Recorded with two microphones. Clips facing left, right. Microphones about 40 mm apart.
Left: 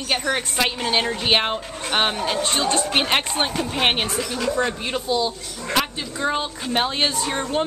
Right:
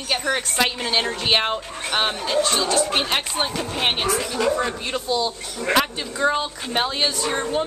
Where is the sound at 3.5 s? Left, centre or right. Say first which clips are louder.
Left 2 dB; centre.